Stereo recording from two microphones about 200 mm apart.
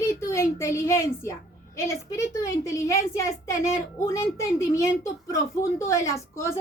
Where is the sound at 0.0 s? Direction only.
15° left (ahead or behind).